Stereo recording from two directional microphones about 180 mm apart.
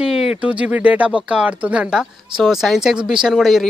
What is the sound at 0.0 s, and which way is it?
Speech, 5° right (ahead or behind).